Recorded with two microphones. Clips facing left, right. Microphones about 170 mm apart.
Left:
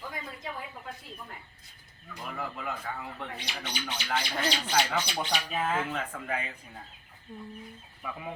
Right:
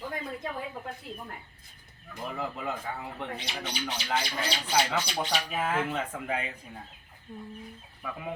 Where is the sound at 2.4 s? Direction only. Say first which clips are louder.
Right 2 dB; 20° right (ahead or behind).